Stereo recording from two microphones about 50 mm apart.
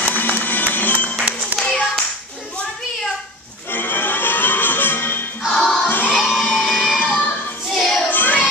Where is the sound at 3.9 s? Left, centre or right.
Left.